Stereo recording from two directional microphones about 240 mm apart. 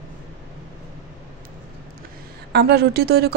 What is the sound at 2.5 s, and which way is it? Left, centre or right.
Speech, right.